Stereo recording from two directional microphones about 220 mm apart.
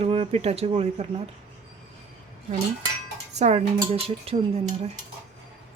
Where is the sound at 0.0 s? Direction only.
25° right (ahead or behind).